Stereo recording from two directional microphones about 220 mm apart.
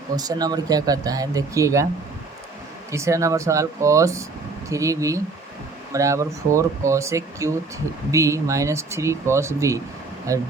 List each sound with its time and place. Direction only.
0.2 s speech: 15° right (ahead or behind)
2.9 s speech: 15° right (ahead or behind)